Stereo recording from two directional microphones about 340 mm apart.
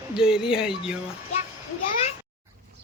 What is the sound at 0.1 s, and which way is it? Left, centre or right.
Speech, centre.